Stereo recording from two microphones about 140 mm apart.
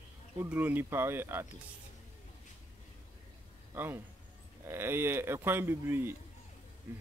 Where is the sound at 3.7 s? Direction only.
15° right (ahead or behind).